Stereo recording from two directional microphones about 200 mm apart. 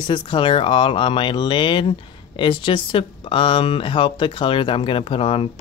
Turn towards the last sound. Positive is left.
turn(degrees=30)  # may be behind; listen again after turning